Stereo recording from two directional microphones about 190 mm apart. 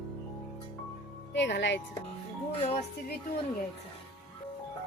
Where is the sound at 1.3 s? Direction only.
70° left (ahead or behind).